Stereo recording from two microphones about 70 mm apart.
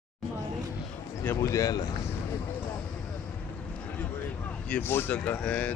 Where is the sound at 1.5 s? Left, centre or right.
Left.